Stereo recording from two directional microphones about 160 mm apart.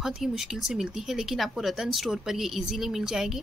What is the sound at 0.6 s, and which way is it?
Speech, centre (ahead or behind).